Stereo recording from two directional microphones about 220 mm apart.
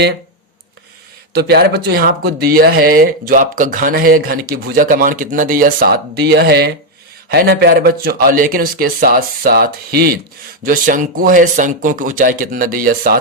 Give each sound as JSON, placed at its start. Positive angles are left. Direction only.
{"t": 1.3, "sound": "speech", "side_deg": -45}